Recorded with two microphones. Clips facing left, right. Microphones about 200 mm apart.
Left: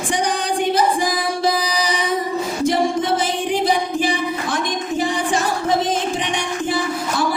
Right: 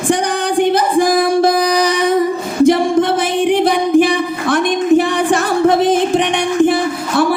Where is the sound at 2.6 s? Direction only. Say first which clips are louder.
Right 9 dB; 60° right (ahead or behind).